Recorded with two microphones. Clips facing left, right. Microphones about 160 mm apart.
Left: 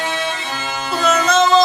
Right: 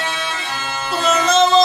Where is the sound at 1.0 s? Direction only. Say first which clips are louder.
Even; centre (ahead or behind).